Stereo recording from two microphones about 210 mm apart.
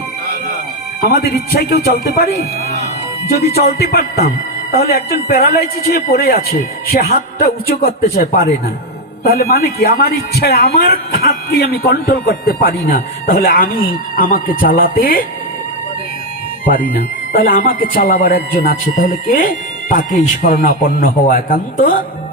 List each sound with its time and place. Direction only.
1.0 s a man's voice: 50° left (ahead or behind)
16.6 s speech: 40° left (ahead or behind)